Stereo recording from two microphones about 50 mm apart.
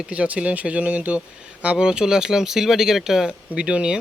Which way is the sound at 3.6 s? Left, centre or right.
Centre.